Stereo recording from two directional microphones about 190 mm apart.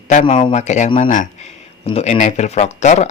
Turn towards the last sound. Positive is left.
turn(degrees=35)  # may be behind; listen again after turning